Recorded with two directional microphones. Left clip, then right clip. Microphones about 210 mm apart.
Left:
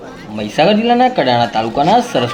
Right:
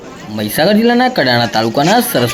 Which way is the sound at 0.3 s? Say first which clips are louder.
Even; 20° right (ahead or behind).